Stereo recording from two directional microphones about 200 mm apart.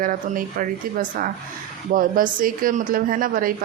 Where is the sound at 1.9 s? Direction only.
45° right (ahead or behind).